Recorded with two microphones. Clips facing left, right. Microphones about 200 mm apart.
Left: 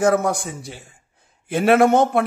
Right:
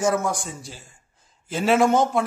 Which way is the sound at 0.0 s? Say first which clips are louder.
Left 5 dB; 60° left (ahead or behind).